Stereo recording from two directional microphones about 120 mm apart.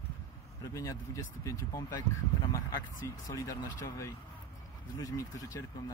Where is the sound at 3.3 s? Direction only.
30° left (ahead or behind).